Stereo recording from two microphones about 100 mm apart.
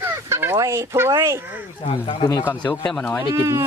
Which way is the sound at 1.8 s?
70° left (ahead or behind).